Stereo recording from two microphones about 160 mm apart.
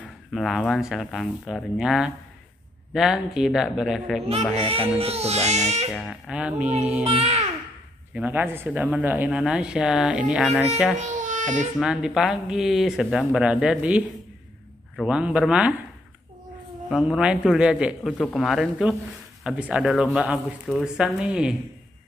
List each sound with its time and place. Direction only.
0.0 s speech: centre (ahead or behind)
4.6 s speech: 35° right (ahead or behind)
5.9 s speech: centre (ahead or behind)
7.1 s speech: 40° right (ahead or behind)
8.1 s speech: 10° right (ahead or behind)
11.0 s speech: 50° right (ahead or behind)
11.8 s speech: 5° right (ahead or behind)
16.9 s speech: 5° right (ahead or behind)